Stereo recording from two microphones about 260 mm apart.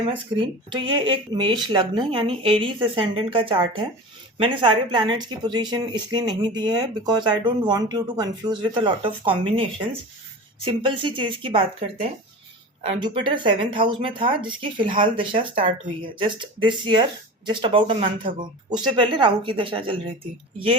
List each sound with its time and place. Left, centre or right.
0.1 s speech: centre